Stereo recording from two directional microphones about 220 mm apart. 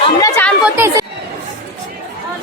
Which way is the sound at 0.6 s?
10° right (ahead or behind).